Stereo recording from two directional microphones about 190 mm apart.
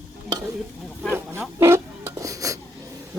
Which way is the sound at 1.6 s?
15° right (ahead or behind).